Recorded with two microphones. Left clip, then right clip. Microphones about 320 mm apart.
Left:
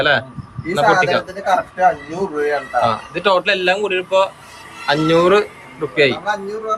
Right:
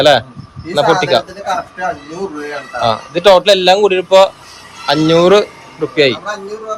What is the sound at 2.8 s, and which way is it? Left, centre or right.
Speech, centre.